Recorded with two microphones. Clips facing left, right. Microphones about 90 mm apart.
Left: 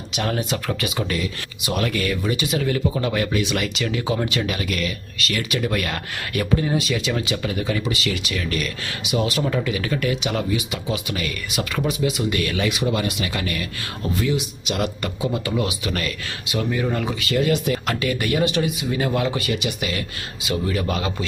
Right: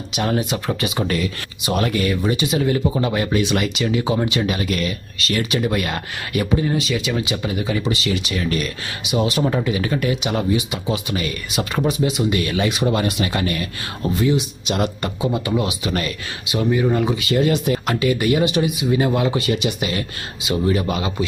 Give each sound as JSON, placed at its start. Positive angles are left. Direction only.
{"t": 0.1, "sound": "speech", "side_deg": -15}
{"t": 0.7, "sound": "speech", "side_deg": -25}
{"t": 3.6, "sound": "speech", "side_deg": -15}
{"t": 5.7, "sound": "speech", "side_deg": -15}
{"t": 6.6, "sound": "speech", "side_deg": 0}
{"t": 7.8, "sound": "speech", "side_deg": -30}
{"t": 12.7, "sound": "speech", "side_deg": -40}
{"t": 17.8, "sound": "speech", "side_deg": -15}